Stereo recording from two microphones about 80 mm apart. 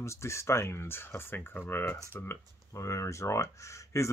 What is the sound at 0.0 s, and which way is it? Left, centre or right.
Speech, left.